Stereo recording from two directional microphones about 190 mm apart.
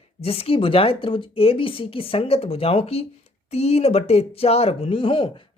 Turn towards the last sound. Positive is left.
turn(degrees=30)  # may be behind; listen again after turning